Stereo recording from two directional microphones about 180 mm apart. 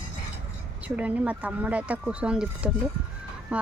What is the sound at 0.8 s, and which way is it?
Speech, 10° right (ahead or behind).